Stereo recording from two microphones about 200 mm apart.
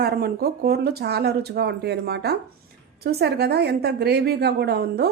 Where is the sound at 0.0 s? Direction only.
50° right (ahead or behind).